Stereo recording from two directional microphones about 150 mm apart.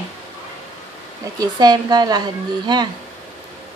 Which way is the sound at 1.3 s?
25° right (ahead or behind).